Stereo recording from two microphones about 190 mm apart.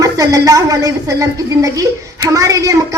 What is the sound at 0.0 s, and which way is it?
A woman's voice, 20° right (ahead or behind).